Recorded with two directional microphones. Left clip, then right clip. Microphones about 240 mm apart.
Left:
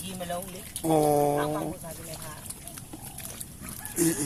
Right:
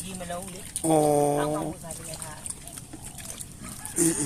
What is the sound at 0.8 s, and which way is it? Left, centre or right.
Speech, centre.